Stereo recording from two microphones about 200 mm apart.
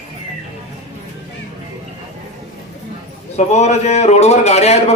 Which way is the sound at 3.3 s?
35° left (ahead or behind).